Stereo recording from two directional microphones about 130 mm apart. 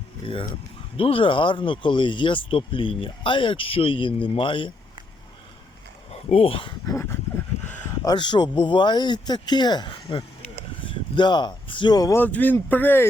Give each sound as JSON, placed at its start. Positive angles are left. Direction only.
{"t": 0.9, "sound": "speech", "side_deg": 45}
{"t": 6.1, "sound": "speech", "side_deg": 50}
{"t": 6.8, "sound": "dog", "side_deg": 20}
{"t": 7.6, "sound": "a sound", "side_deg": 10}
{"t": 8.0, "sound": "speech", "side_deg": 35}
{"t": 12.1, "sound": "speech", "side_deg": 15}